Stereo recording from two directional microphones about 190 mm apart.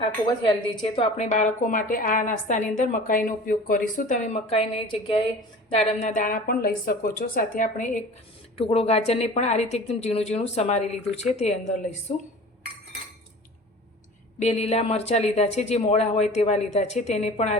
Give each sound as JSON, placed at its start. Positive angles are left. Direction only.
{"t": 0.4, "sound": "a woman's voice", "side_deg": 30}
{"t": 8.5, "sound": "a woman's voice", "side_deg": 30}
{"t": 14.3, "sound": "a woman's voice", "side_deg": 35}